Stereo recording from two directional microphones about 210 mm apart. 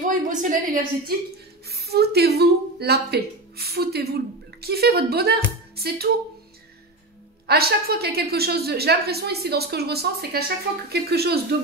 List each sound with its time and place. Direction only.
0.1 s speech: 40° right (ahead or behind)
7.4 s a woman's voice: 50° right (ahead or behind)